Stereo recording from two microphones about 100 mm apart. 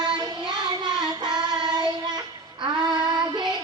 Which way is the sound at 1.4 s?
45° right (ahead or behind).